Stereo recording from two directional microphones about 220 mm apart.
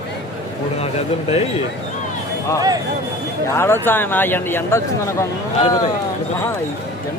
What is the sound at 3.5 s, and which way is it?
Speech, 10° left (ahead or behind).